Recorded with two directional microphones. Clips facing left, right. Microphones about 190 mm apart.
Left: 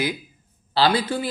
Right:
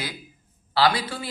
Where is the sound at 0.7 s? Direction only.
30° left (ahead or behind).